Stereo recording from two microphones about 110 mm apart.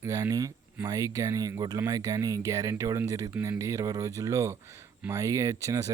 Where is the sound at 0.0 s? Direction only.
30° right (ahead or behind).